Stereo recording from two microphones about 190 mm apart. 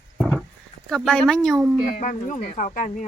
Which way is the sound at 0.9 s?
5° left (ahead or behind).